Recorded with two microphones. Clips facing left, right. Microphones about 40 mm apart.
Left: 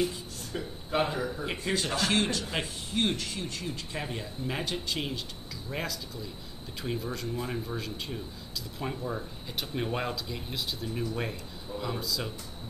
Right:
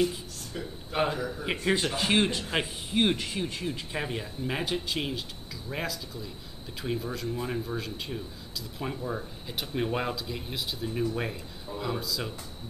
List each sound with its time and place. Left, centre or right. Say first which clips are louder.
1.4 s speech: right 4 dB; centre